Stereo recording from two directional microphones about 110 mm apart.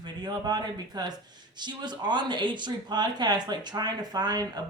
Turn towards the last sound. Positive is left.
turn(degrees=-40)  # may be behind; listen again after turning